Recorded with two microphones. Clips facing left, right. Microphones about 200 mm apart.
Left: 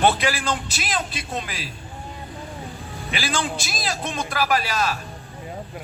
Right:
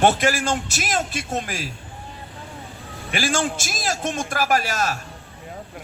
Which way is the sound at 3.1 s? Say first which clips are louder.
Right 3 dB; 45° right (ahead or behind).